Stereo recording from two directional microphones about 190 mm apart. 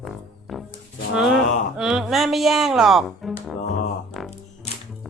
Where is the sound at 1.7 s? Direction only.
5° right (ahead or behind).